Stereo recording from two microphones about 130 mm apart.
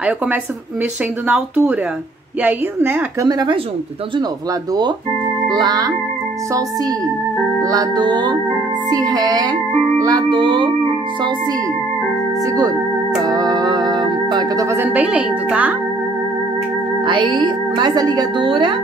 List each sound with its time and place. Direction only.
1.2 s a woman's voice: 10° right (ahead or behind)
3.2 s music: 30° right (ahead or behind)
5.5 s music: 30° right (ahead or behind)
7.6 s music: 30° right (ahead or behind)
12.5 s speech: 30° right (ahead or behind)
14.9 s a woman's voice: 10° right (ahead or behind)
17.0 s music: 35° right (ahead or behind)